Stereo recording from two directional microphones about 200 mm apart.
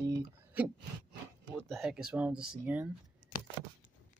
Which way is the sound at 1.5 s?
Centre (ahead or behind).